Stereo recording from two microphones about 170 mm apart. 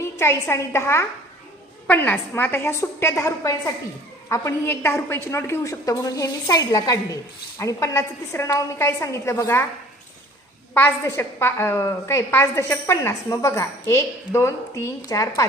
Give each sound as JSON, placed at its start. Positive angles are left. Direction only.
{"t": 0.0, "sound": "a woman's voice", "side_deg": 15}
{"t": 10.8, "sound": "a woman's voice", "side_deg": 15}